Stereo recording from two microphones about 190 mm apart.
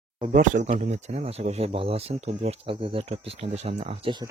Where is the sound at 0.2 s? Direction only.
40° right (ahead or behind).